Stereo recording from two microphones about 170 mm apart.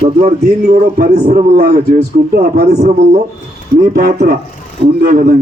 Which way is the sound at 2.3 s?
65° right (ahead or behind).